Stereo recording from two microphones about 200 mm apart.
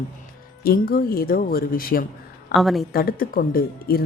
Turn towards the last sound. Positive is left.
turn(degrees=45)  # may be behind; listen again after turning